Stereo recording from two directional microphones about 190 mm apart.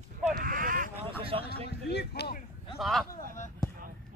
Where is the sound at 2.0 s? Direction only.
60° left (ahead or behind).